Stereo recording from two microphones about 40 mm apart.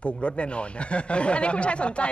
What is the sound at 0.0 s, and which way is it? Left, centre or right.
Speech, left.